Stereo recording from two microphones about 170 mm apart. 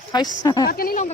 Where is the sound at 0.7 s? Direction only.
60° left (ahead or behind).